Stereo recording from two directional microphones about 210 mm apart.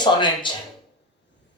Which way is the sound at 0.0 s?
20° left (ahead or behind).